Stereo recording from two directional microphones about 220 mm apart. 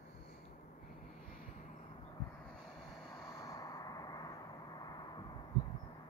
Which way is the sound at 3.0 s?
15° left (ahead or behind).